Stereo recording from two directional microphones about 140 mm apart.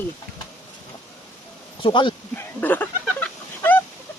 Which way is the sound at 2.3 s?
10° left (ahead or behind).